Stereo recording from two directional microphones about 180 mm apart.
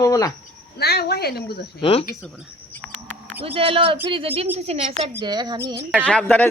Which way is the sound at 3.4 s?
30° right (ahead or behind).